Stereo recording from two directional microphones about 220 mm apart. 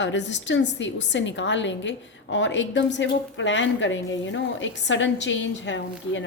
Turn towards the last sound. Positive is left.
turn(degrees=55)  # may be behind; listen again after turning